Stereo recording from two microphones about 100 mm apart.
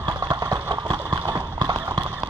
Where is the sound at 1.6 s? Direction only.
50° right (ahead or behind).